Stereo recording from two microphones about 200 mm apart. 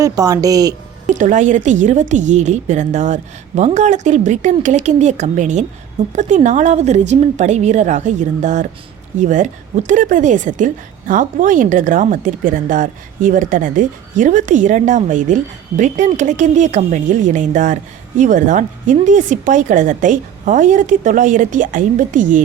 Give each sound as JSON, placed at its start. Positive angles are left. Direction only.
{"t": 0.0, "sound": "speech", "side_deg": -15}
{"t": 1.0, "sound": "speech", "side_deg": -40}